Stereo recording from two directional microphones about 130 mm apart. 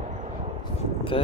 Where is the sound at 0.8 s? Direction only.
45° left (ahead or behind).